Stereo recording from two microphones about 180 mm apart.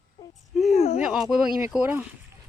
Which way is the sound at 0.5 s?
Centre (ahead or behind).